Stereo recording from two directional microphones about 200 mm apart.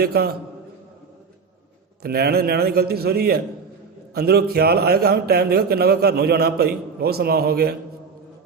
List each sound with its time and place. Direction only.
0.0 s a man's voice: 50° right (ahead or behind)
2.0 s a man's voice: 50° right (ahead or behind)